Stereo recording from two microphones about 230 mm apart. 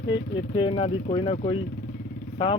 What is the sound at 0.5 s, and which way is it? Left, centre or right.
Speech, left.